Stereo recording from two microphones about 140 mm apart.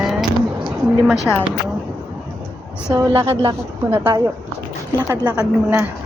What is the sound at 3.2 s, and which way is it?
Speech, 40° right (ahead or behind).